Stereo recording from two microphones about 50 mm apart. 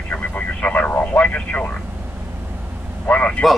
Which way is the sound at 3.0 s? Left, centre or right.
Left.